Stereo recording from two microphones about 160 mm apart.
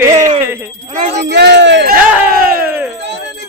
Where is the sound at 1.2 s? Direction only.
90° right.